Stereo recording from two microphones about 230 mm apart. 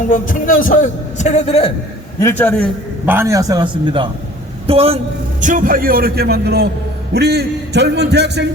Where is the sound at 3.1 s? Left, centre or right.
Centre.